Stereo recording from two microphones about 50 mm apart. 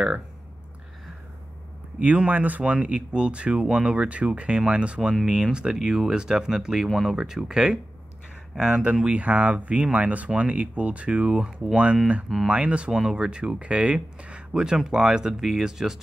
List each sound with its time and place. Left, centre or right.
2.0 s speech: right; by 16.0 s centre